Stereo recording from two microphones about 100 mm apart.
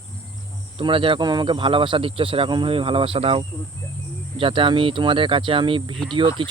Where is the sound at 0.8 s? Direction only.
60° right (ahead or behind).